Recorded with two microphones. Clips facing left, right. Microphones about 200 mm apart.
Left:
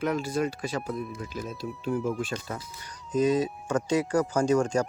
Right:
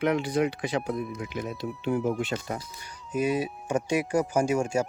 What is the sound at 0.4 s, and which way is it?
Speech, 15° right (ahead or behind).